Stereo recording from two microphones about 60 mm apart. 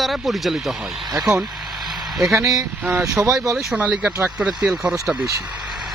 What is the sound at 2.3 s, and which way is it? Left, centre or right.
Speech, right.